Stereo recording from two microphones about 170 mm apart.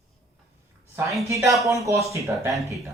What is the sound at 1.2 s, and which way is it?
Speech, 20° right (ahead or behind).